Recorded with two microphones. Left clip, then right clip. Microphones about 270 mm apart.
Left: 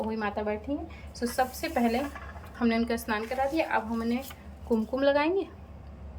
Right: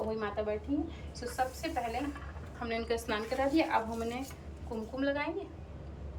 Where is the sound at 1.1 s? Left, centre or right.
Left.